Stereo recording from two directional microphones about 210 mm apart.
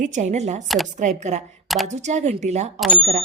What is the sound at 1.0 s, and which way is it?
A woman's voice, 35° right (ahead or behind).